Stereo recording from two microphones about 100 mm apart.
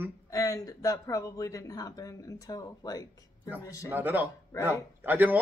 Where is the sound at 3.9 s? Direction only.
20° right (ahead or behind).